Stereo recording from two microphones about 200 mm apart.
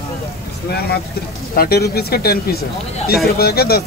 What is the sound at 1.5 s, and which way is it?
Speech, 50° left (ahead or behind).